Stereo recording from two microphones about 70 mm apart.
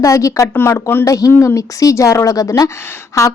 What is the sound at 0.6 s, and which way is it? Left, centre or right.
Speech, left.